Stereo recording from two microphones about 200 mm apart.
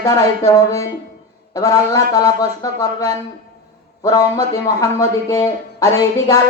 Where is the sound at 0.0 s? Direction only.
15° left (ahead or behind).